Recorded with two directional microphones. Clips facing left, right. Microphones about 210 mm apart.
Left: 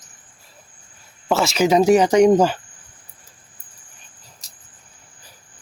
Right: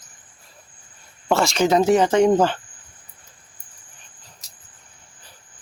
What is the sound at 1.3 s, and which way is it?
Speech, centre (ahead or behind).